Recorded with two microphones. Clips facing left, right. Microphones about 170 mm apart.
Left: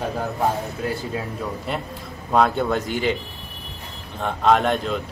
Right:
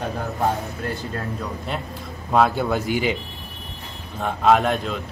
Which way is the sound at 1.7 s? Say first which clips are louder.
Left 1 dB; centre (ahead or behind).